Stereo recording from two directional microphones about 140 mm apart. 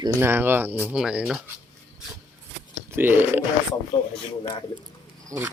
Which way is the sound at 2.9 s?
15° right (ahead or behind).